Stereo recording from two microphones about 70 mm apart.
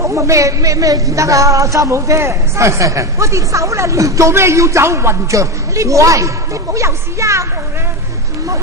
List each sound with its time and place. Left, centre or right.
0.0 s speech: right